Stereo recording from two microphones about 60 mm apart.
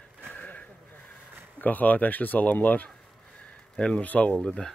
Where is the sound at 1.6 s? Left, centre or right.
Left.